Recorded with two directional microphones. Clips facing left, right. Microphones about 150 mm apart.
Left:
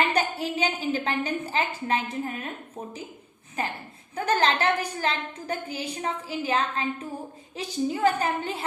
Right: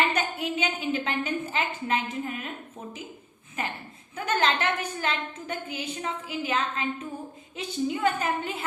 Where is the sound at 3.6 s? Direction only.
35° left (ahead or behind).